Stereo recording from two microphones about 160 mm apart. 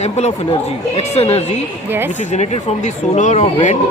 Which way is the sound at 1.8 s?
15° right (ahead or behind).